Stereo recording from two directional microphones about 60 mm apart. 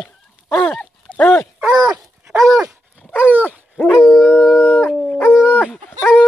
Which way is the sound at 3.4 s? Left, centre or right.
Left.